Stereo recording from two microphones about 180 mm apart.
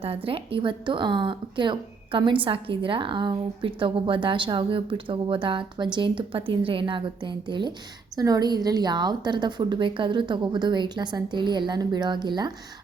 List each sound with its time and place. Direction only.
0.3 s speech: 30° right (ahead or behind)